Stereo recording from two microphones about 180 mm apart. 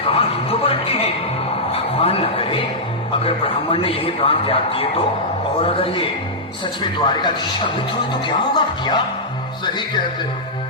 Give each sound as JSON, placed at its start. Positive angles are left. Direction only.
{"t": 0.0, "sound": "music", "side_deg": 30}
{"t": 1.7, "sound": "a sound", "side_deg": 30}
{"t": 3.2, "sound": "a man's voice", "side_deg": 30}